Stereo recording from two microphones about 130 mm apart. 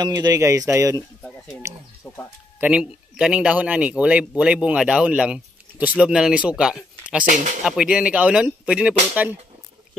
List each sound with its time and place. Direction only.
0.0 s speech: 30° right (ahead or behind)
2.0 s speech: 10° left (ahead or behind)
2.6 s speech: 5° right (ahead or behind)